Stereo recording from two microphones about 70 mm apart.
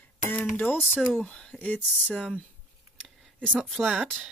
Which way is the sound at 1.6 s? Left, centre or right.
Left.